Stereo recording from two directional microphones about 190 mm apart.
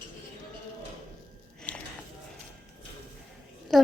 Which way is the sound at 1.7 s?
10° left (ahead or behind).